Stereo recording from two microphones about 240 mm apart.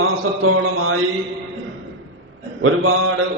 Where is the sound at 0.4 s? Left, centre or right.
Right.